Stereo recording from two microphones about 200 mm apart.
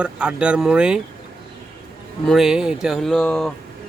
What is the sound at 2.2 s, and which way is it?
Speech, centre (ahead or behind).